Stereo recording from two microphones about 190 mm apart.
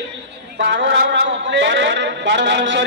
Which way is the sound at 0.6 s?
75° right (ahead or behind).